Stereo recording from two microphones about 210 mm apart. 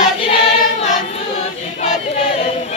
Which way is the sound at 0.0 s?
25° left (ahead or behind).